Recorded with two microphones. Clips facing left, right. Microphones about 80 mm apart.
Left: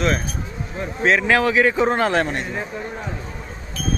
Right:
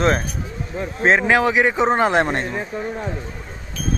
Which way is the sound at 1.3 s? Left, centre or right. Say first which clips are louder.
Even; centre.